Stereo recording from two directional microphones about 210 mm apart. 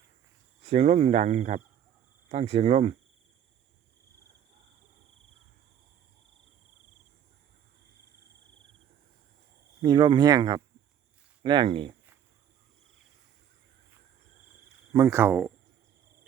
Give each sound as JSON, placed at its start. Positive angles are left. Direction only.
{"t": 0.6, "sound": "speech", "side_deg": -30}
{"t": 9.8, "sound": "speech", "side_deg": -20}
{"t": 14.9, "sound": "speech", "side_deg": -15}